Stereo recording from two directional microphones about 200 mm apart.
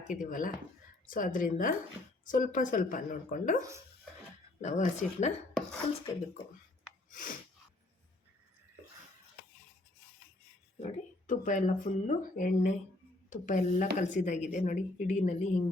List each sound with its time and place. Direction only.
0.1 s a woman's voice: 40° left (ahead or behind)
4.6 s speech: 35° left (ahead or behind)
7.1 s sneeze: 40° left (ahead or behind)
10.8 s speech: 35° left (ahead or behind)